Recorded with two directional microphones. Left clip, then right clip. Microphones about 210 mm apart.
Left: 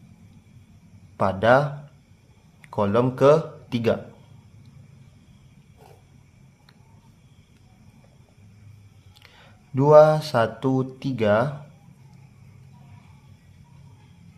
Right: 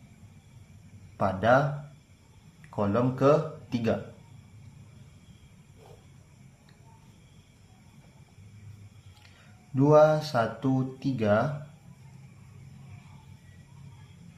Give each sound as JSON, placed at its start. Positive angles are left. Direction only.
{"t": 1.1, "sound": "speech", "side_deg": 40}
{"t": 9.7, "sound": "speech", "side_deg": 40}